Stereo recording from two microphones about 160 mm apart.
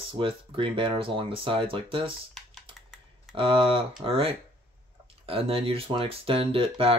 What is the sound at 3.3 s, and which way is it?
Speech, 35° right (ahead or behind).